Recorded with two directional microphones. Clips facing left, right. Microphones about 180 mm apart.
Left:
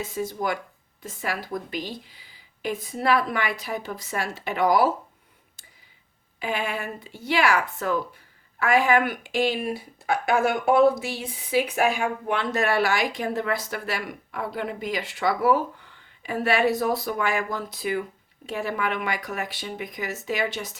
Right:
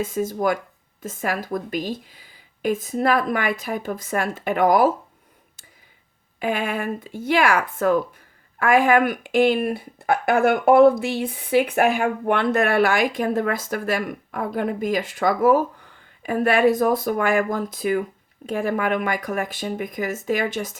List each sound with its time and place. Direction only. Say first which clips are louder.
0.0 s speech: right 6 dB; 50° right (ahead or behind)
6.4 s speech: right 5 dB; 50° right (ahead or behind)